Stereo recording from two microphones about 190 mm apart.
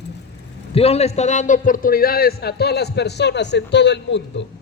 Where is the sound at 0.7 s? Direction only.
30° left (ahead or behind); by 4.4 s 65° left (ahead or behind).